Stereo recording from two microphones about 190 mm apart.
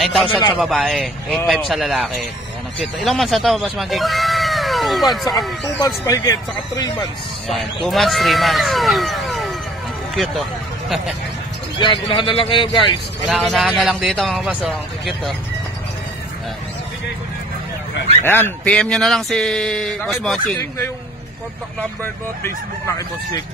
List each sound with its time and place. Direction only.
0.0 s a man's voice: centre (ahead or behind)
6.0 s speech: 15° left (ahead or behind)
7.4 s speech: centre (ahead or behind)
11.8 s speech: 25° left (ahead or behind)
13.4 s speech: centre (ahead or behind)
18.2 s speech: 10° left (ahead or behind)
22.4 s speech: 15° left (ahead or behind)